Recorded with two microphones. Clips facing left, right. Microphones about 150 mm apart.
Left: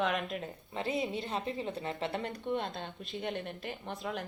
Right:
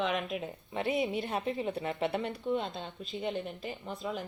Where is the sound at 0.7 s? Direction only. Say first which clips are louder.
Right 3 dB; 20° right (ahead or behind).